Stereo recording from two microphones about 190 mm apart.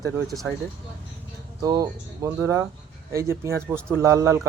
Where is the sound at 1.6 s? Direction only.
20° right (ahead or behind).